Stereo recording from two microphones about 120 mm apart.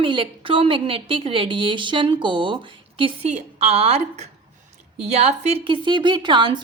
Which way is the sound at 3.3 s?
65° right (ahead or behind).